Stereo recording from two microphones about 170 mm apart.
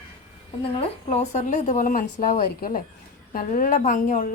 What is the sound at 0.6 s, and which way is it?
Speech, 40° left (ahead or behind).